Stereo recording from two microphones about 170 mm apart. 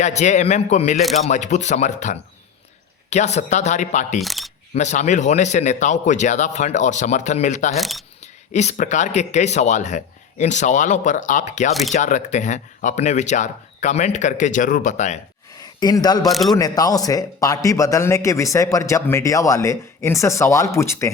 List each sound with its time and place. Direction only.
0.0 s speech: 45° left (ahead or behind)
4.2 s single-lens reflex camera: centre (ahead or behind)
4.7 s speech: 45° left (ahead or behind)
7.8 s a man's voice: centre (ahead or behind)
8.5 s speech: 45° left (ahead or behind)
15.6 s speech: 25° left (ahead or behind)
16.3 s a man's voice: centre (ahead or behind)
16.6 s a man's voice: 20° left (ahead or behind)